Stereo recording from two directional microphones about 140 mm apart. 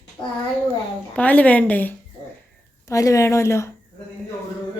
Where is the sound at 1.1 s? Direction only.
10° left (ahead or behind).